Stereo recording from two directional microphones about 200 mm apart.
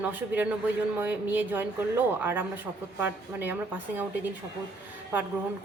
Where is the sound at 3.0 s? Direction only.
10° right (ahead or behind).